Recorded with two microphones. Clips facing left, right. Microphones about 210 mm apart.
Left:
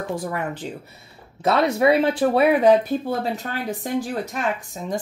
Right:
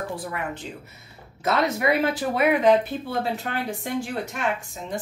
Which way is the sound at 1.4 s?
30° left (ahead or behind).